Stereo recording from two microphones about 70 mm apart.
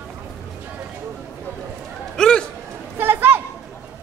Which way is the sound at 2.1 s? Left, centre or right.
Centre.